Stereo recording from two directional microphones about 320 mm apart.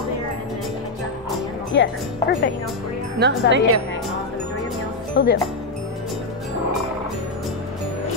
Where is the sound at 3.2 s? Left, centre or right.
Right.